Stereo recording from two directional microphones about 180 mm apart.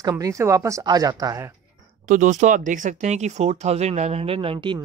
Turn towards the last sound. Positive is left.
turn(degrees=-30)  # may be behind; listen again after turning